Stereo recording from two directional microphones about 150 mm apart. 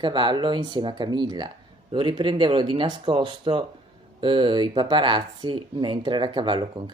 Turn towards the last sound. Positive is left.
turn(degrees=-30)  # may be behind; listen again after turning